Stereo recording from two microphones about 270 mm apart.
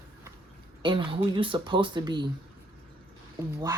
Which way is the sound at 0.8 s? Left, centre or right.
Centre.